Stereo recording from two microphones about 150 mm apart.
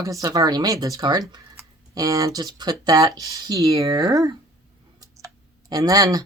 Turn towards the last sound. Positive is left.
turn(degrees=-25)  # may be behind; listen again after turning